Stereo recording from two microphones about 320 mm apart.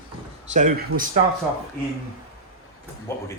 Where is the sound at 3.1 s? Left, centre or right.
Centre.